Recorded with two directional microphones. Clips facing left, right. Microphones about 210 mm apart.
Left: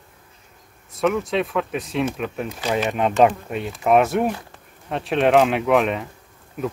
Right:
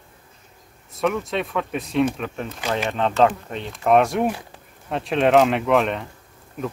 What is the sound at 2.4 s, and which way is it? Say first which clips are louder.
Speech: left 2 dB; 15° left (ahead or behind).